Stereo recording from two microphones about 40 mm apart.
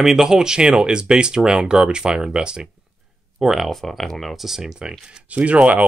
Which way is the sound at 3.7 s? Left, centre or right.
Centre.